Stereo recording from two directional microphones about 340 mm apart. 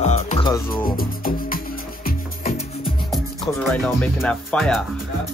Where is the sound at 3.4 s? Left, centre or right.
Centre.